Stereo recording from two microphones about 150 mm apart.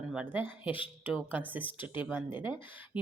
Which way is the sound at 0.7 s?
35° left (ahead or behind).